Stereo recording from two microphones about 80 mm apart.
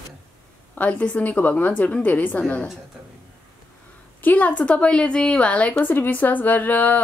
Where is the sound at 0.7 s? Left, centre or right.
Centre.